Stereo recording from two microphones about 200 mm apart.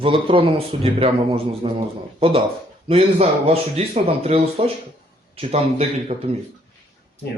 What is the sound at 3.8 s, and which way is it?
Speech, 30° right (ahead or behind).